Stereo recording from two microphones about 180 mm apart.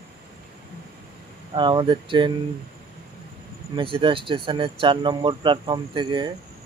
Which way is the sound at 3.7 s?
30° right (ahead or behind).